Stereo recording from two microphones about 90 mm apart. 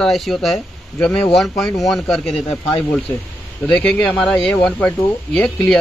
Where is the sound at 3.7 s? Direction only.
15° left (ahead or behind).